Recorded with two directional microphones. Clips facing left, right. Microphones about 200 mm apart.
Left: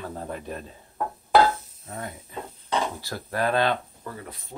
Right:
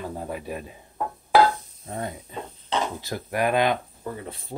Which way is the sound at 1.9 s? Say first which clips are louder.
Right 4 dB; 25° right (ahead or behind).